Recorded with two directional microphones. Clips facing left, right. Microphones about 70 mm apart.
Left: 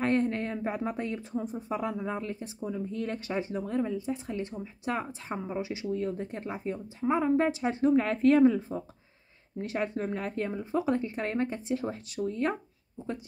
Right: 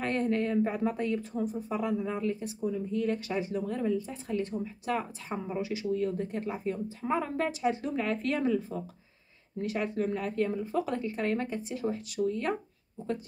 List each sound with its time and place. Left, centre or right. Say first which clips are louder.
0.0 s speech: left 1 dB; left